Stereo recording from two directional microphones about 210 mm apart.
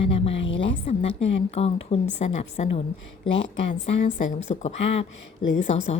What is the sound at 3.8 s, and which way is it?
A woman's voice, 35° left (ahead or behind).